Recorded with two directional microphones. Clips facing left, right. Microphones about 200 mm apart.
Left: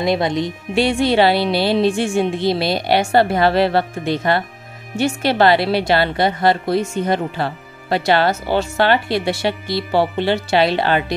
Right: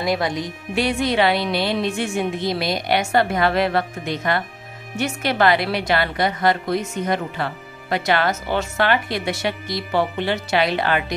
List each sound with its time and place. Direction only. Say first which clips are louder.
0.0 s a woman's voice: left 4 dB; 25° left (ahead or behind)